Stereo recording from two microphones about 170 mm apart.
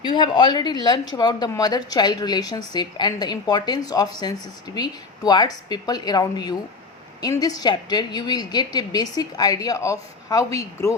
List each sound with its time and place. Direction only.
0.0 s speech: 25° left (ahead or behind)